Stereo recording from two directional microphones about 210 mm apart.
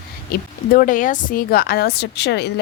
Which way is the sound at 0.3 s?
40° left (ahead or behind).